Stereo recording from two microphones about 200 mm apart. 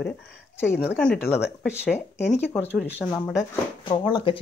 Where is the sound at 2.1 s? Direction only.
35° left (ahead or behind).